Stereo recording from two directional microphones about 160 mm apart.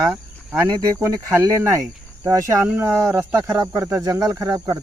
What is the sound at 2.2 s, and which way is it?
Speech, 20° right (ahead or behind).